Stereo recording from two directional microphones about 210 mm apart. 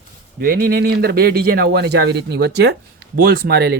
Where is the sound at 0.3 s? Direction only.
45° right (ahead or behind).